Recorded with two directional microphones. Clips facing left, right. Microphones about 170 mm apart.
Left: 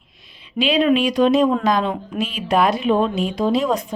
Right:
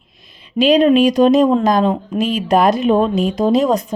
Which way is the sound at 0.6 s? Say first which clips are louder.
Right 6 dB; 40° right (ahead or behind).